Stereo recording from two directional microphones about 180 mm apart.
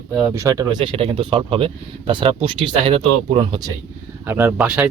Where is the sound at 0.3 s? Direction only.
20° right (ahead or behind).